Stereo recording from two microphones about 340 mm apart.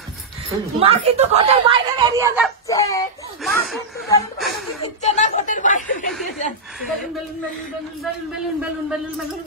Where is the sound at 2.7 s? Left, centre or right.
Centre.